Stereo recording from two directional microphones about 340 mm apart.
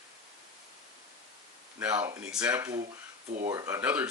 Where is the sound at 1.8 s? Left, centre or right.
Centre.